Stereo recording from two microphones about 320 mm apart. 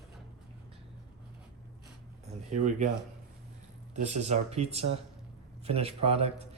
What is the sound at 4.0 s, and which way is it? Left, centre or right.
A man's voice, right.